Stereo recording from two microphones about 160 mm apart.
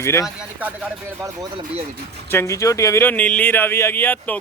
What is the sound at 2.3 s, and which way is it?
Speech, 20° left (ahead or behind).